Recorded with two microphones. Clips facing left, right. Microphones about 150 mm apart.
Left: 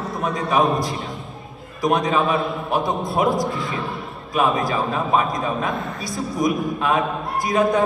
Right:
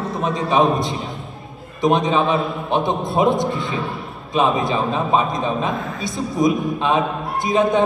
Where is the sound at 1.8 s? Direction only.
25° right (ahead or behind).